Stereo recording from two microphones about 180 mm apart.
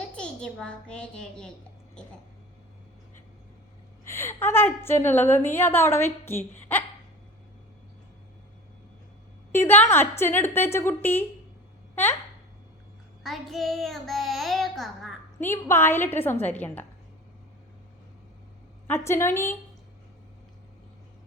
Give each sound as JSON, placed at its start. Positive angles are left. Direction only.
{"t": 0.1, "sound": "a child's voice", "side_deg": 5}
{"t": 4.0, "sound": "a woman's voice", "side_deg": 15}
{"t": 9.5, "sound": "a woman's voice", "side_deg": 15}
{"t": 13.2, "sound": "a child's voice", "side_deg": 0}
{"t": 15.4, "sound": "a woman's voice", "side_deg": 15}
{"t": 18.9, "sound": "a woman's voice", "side_deg": 15}